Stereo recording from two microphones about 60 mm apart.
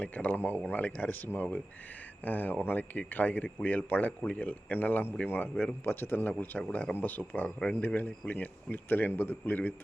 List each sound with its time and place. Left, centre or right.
0.0 s speech: left
7.2 s speech: centre
7.6 s speech: left